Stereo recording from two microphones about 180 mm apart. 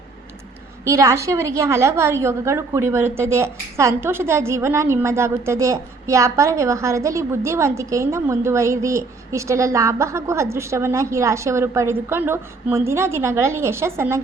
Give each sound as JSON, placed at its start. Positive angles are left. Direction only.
{"t": 0.9, "sound": "a woman's voice", "side_deg": -15}